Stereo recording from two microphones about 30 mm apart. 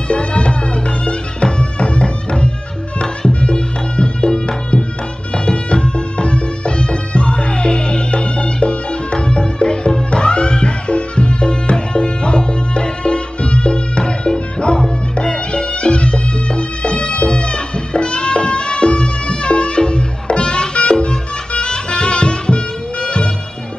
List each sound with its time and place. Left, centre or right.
0.1 s music: left